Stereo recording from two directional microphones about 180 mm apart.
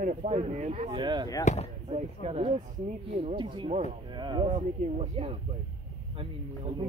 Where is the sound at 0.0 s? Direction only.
45° right (ahead or behind); by 1.3 s 25° right (ahead or behind).